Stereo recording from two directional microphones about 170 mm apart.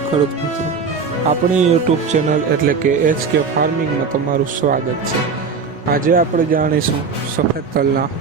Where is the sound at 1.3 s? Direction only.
40° right (ahead or behind).